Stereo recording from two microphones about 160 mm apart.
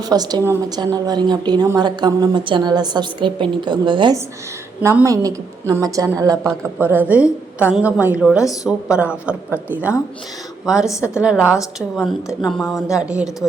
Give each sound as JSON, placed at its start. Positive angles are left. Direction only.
{"t": 0.0, "sound": "a woman's voice", "side_deg": -25}
{"t": 4.8, "sound": "a woman's voice", "side_deg": -20}
{"t": 6.7, "sound": "a woman's voice", "side_deg": -10}